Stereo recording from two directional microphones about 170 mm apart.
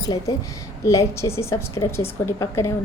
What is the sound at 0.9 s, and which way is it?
A woman's voice, 15° left (ahead or behind).